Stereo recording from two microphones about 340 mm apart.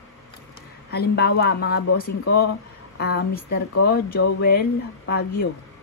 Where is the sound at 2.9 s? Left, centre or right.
Left.